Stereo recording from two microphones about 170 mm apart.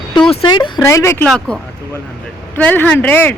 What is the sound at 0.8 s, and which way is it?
Speech, 15° left (ahead or behind).